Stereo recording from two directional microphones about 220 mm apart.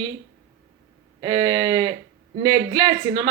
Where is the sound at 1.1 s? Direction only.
20° right (ahead or behind).